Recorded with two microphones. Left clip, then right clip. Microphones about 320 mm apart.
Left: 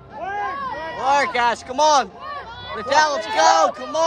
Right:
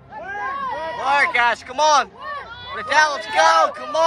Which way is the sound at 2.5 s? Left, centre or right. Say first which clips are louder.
Left 1 dB; left.